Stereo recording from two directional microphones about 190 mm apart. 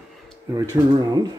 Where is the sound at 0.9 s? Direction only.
20° right (ahead or behind).